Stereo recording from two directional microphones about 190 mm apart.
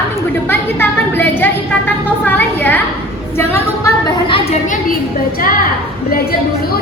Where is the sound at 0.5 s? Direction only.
10° left (ahead or behind).